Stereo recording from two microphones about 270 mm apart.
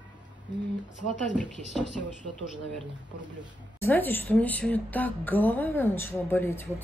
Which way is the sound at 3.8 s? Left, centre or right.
Centre.